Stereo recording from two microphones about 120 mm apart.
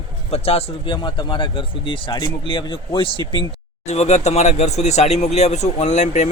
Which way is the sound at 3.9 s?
70° left (ahead or behind).